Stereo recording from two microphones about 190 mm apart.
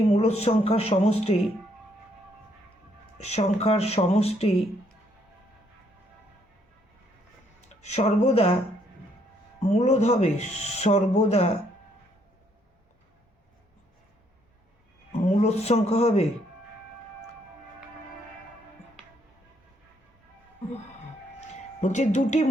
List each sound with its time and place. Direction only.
0.1 s speech: 35° left (ahead or behind)
3.2 s speech: 35° left (ahead or behind)
7.7 s speech: 35° left (ahead or behind)
9.7 s speech: 35° left (ahead or behind)
15.3 s speech: 35° left (ahead or behind)
21.8 s speech: 40° left (ahead or behind)